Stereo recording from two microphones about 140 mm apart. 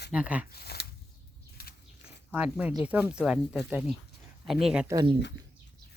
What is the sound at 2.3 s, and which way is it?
A woman's voice, 10° right (ahead or behind).